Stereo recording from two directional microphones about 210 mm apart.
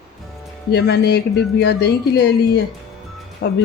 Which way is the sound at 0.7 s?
50° left (ahead or behind).